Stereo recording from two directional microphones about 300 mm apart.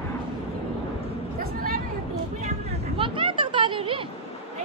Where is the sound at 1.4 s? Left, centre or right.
Right.